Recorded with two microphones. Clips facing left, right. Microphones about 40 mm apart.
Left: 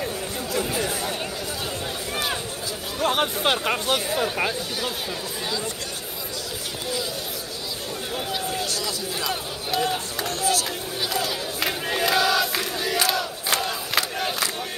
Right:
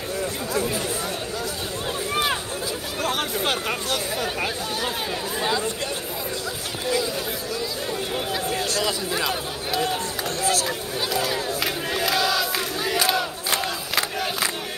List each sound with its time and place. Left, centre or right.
3.0 s speech: centre
9.3 s speech: centre
10.2 s speech: right
11.1 s crowd: centre
13.0 s crowd: centre
13.9 s battle cry: centre